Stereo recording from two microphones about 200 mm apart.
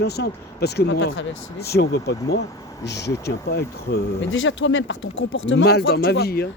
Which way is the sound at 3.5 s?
55° left (ahead or behind).